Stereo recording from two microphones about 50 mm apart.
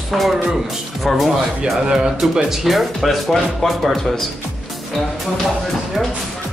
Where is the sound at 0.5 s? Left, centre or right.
Centre.